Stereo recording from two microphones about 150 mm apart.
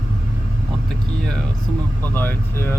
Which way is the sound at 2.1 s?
15° left (ahead or behind).